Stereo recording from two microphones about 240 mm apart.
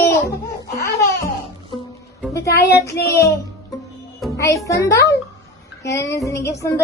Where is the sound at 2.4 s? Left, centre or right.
Left.